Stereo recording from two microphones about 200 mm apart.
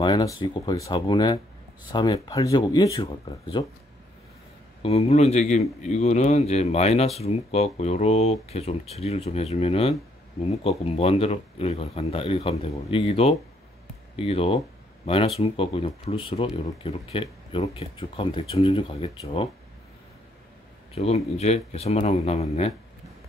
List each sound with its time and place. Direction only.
0.0 s speech: 20° left (ahead or behind)
4.8 s speech: 30° left (ahead or behind)
20.9 s speech: 30° left (ahead or behind)